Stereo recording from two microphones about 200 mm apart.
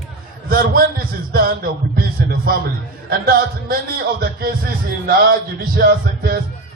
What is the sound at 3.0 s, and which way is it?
Speech, 50° right (ahead or behind).